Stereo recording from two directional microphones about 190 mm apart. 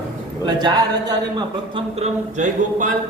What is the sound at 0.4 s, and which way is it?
A man's voice, 20° right (ahead or behind).